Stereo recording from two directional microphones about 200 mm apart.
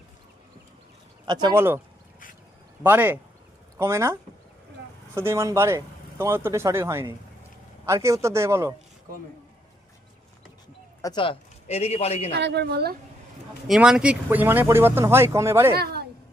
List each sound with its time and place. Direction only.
1.2 s speech: 20° right (ahead or behind)
2.8 s speech: 10° right (ahead or behind)
11.0 s a man's voice: 25° left (ahead or behind)
12.3 s a woman's voice: 60° right (ahead or behind)
13.7 s speech: 5° right (ahead or behind)
15.7 s a woman's voice: 50° right (ahead or behind)